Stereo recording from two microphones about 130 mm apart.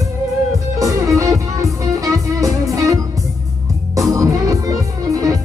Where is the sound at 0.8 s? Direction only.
25° right (ahead or behind).